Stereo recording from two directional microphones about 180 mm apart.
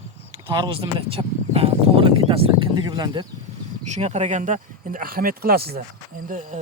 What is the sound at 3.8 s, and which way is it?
A man's voice, 40° right (ahead or behind).